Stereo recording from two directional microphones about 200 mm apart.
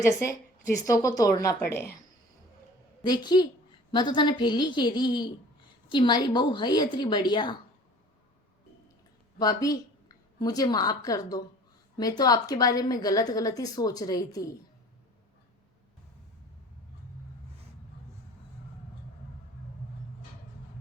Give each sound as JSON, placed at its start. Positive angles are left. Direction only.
{"t": 0.0, "sound": "a woman's voice", "side_deg": 15}
{"t": 3.0, "sound": "a woman's voice", "side_deg": 20}
{"t": 9.4, "sound": "a woman's voice", "side_deg": 20}